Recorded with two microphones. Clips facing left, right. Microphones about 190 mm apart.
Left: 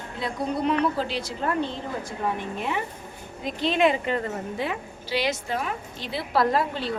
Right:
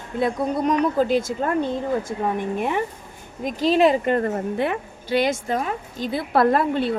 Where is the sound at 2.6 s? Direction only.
50° right (ahead or behind).